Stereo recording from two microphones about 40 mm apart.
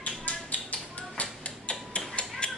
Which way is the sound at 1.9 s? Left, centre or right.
Left.